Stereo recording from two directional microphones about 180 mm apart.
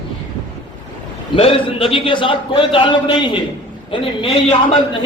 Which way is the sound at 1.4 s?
30° left (ahead or behind).